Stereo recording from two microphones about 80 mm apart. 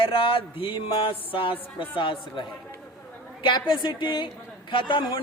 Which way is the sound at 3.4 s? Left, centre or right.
Left.